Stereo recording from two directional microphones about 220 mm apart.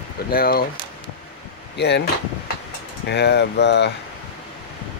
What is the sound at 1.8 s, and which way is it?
Speech, 50° left (ahead or behind).